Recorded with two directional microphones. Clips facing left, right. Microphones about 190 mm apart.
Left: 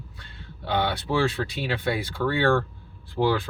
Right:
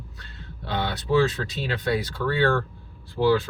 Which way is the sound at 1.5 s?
10° left (ahead or behind).